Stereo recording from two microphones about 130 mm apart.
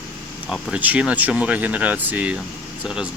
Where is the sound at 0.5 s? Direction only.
5° right (ahead or behind).